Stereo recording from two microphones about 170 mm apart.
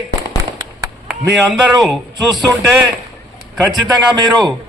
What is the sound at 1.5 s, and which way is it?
Speech, centre (ahead or behind).